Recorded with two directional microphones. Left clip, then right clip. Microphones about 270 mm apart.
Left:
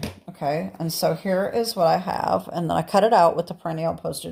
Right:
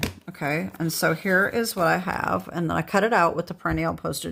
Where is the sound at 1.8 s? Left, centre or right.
Right.